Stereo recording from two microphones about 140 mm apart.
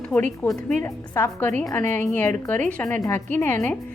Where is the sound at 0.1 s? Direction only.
25° left (ahead or behind).